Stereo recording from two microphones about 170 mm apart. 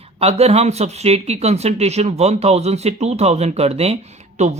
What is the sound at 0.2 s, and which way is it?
Speech, 35° right (ahead or behind).